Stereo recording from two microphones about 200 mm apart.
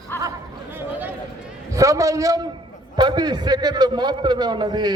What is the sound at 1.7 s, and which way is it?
A man's voice, 15° right (ahead or behind).